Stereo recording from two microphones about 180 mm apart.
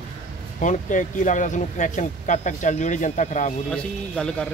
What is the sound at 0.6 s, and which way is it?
Speech, 45° left (ahead or behind).